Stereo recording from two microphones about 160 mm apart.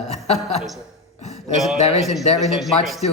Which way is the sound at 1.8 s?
45° left (ahead or behind).